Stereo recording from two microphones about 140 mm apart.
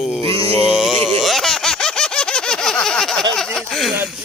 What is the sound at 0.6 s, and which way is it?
Speech, centre (ahead or behind).